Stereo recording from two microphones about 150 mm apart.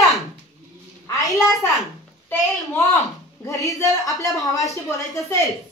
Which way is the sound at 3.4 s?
20° left (ahead or behind).